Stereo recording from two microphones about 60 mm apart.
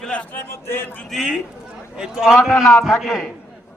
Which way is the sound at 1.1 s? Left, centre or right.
Centre.